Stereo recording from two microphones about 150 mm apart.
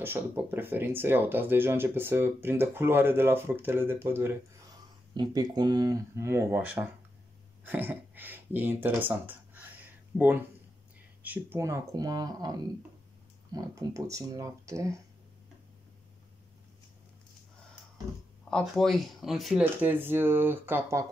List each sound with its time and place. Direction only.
0.0 s speech: 15° right (ahead or behind)
5.1 s speech: 30° right (ahead or behind)
18.5 s speech: centre (ahead or behind)
19.6 s speech: 10° right (ahead or behind)